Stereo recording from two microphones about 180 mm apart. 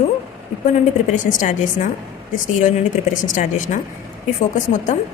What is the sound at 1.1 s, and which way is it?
Speech, 45° left (ahead or behind).